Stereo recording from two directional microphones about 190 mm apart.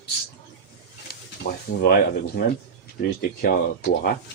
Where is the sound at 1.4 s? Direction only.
60° left (ahead or behind).